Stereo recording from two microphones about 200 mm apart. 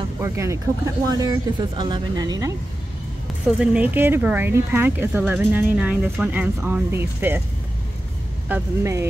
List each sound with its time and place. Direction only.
0.2 s speech: 15° right (ahead or behind)
3.5 s speech: 5° right (ahead or behind)
8.5 s speech: 10° right (ahead or behind)